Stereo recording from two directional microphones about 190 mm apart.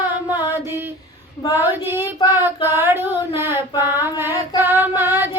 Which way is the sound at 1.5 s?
10° right (ahead or behind).